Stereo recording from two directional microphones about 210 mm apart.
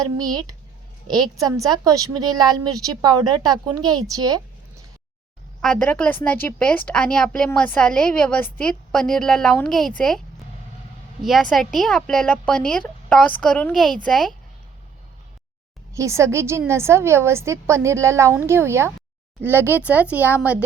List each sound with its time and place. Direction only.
0.0 s a woman's voice: 20° right (ahead or behind)
5.6 s a woman's voice: 5° left (ahead or behind)
11.2 s a woman's voice: centre (ahead or behind)
16.0 s a woman's voice: 15° right (ahead or behind)